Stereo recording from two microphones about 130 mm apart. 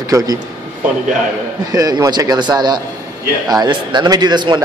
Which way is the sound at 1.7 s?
30° right (ahead or behind).